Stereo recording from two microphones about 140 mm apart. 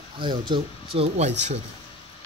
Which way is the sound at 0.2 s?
35° right (ahead or behind).